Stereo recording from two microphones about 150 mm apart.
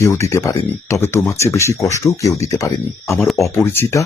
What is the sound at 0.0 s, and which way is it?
Speech, 20° left (ahead or behind).